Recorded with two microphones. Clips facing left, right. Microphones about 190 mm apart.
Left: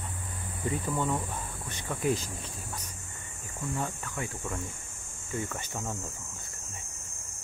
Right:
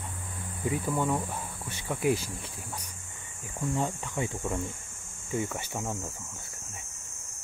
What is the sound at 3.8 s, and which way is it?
Speech, 15° right (ahead or behind).